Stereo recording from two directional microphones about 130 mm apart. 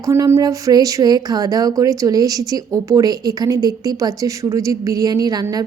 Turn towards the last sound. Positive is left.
turn(degrees=-30)  # may be behind; listen again after turning